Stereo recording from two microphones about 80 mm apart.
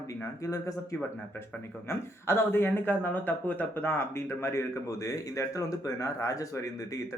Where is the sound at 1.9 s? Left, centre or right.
Left.